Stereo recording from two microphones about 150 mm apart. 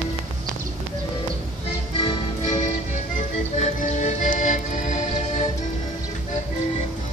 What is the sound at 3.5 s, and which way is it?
Music, 50° left (ahead or behind).